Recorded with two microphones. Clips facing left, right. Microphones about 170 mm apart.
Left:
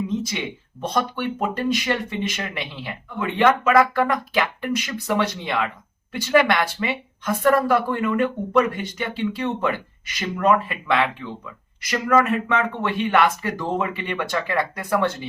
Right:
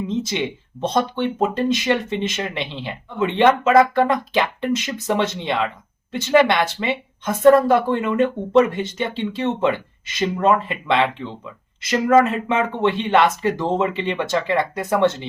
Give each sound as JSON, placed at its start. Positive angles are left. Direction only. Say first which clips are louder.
{"t": 0.2, "sound": "speech", "louder": "right 5 dB", "side_deg": -25}